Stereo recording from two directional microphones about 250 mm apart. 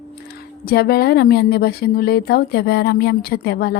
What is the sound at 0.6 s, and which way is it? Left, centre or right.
A woman's voice, left.